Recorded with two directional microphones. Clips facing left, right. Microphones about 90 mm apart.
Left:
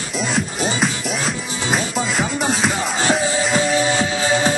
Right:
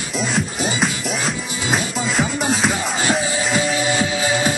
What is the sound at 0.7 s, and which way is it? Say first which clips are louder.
Music: even; centre (ahead or behind).